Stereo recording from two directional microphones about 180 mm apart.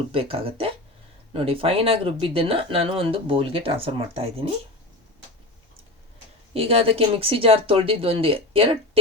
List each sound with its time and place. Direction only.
0.1 s speech: 30° right (ahead or behind)
6.5 s speech: 35° right (ahead or behind)